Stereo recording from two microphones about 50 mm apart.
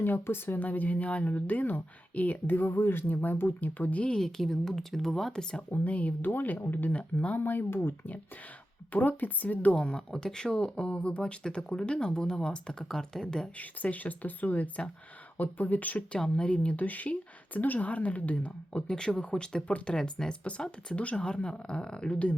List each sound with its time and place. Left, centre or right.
0.0 s speech: left
0.6 s speech: left
2.6 s speech: left
4.1 s speech: centre
5.7 s speech: left
6.9 s a woman's voice: left
7.3 s speech: left
8.9 s speech: left
9.7 s speech: centre
13.6 s speech: left
16.1 s a woman's voice: centre
18.9 s a woman's voice: centre